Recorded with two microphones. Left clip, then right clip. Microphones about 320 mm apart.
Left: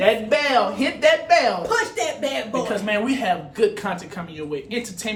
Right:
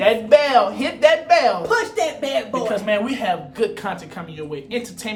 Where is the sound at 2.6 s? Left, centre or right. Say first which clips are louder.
Right 2 dB; centre.